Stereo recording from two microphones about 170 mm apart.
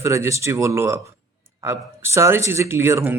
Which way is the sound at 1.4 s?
15° right (ahead or behind).